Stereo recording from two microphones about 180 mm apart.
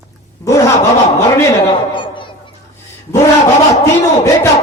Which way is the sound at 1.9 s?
25° left (ahead or behind).